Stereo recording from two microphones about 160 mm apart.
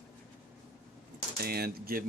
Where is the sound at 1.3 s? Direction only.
75° right (ahead or behind).